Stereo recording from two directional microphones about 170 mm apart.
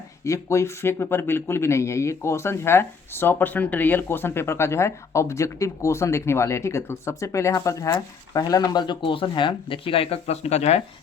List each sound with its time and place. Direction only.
0.3 s speech: 15° left (ahead or behind); by 10.8 s 40° left (ahead or behind)